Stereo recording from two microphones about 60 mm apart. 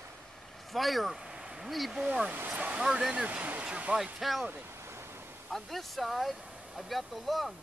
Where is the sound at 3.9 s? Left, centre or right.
Centre.